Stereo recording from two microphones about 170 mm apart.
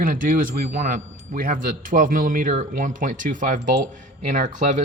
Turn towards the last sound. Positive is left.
turn(degrees=-50)  # may be behind; listen again after turning